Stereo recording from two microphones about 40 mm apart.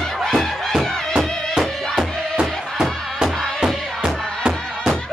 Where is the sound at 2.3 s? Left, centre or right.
Centre.